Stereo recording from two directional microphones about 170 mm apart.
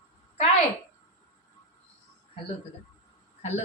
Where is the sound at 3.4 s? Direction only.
40° left (ahead or behind).